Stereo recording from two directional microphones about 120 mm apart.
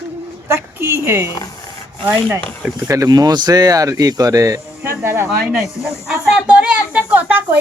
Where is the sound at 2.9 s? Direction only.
30° right (ahead or behind).